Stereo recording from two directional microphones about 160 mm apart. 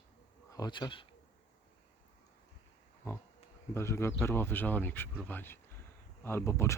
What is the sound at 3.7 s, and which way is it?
Speech, 15° left (ahead or behind).